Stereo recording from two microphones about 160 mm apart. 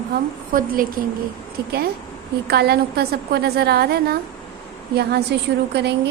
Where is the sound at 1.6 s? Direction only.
80° right.